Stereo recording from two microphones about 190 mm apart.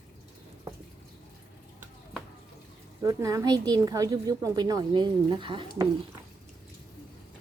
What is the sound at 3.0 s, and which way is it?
A woman's voice, 20° right (ahead or behind).